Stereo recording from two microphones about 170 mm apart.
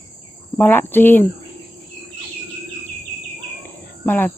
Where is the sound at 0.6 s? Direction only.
10° left (ahead or behind).